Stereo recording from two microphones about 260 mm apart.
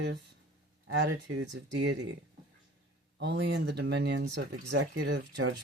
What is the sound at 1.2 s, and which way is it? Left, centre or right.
Speech, right.